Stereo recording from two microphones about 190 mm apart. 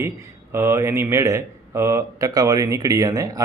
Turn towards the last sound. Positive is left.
turn(degrees=-20)  # may be behind; listen again after turning